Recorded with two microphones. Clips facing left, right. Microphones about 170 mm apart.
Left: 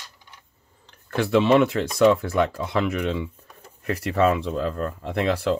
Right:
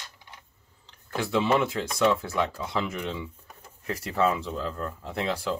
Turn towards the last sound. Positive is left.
turn(degrees=65)  # may be behind; listen again after turning